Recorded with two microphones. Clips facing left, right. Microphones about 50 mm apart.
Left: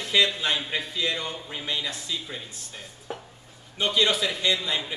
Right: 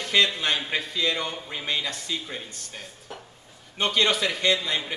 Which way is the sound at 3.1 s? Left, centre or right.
Left.